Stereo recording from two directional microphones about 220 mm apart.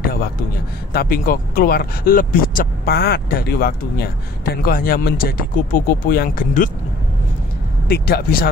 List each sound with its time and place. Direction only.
0.9 s speech: 40° left (ahead or behind)
7.9 s speech: 45° left (ahead or behind)